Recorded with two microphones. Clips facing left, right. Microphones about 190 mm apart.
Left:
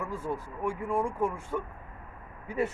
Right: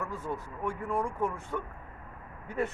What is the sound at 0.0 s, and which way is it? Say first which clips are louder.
Speech: left 2 dB; 10° left (ahead or behind).